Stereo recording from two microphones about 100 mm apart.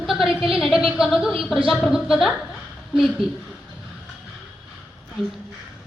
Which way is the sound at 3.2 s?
65° right (ahead or behind).